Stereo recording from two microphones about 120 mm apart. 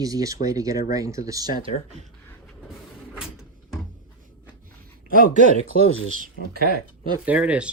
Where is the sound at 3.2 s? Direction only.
5° right (ahead or behind).